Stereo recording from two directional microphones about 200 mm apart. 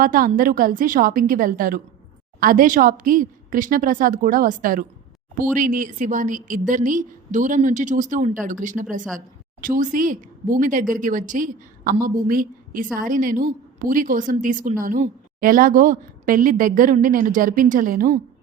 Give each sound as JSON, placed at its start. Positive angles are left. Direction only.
{"t": 0.0, "sound": "a woman's voice", "side_deg": -45}